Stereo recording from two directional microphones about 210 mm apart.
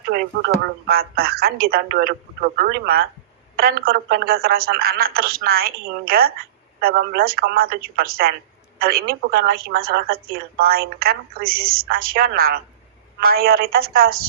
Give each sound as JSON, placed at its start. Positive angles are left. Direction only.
{"t": 0.1, "sound": "a woman's voice", "side_deg": -50}